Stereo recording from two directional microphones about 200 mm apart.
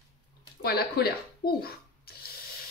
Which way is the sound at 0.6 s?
50° left (ahead or behind).